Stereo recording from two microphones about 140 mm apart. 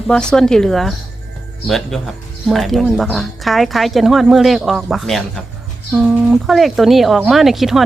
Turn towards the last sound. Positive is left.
turn(degrees=0)  # may be behind; listen again after turning